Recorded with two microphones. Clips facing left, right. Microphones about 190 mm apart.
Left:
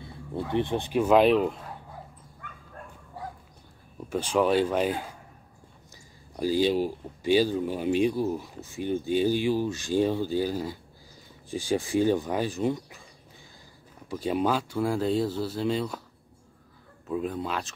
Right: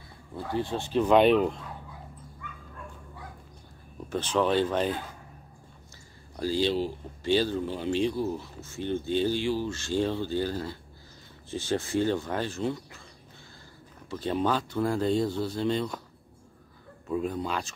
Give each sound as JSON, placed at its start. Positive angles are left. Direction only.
{"t": 0.0, "sound": "speech", "side_deg": 20}
{"t": 4.1, "sound": "speech", "side_deg": 10}
{"t": 6.3, "sound": "speech", "side_deg": 15}
{"t": 14.0, "sound": "speech", "side_deg": 10}
{"t": 17.1, "sound": "speech", "side_deg": 0}